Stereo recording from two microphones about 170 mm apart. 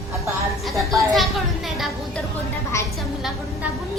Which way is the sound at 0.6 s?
Centre (ahead or behind).